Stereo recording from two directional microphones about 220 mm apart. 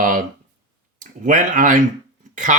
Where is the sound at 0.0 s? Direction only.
35° right (ahead or behind).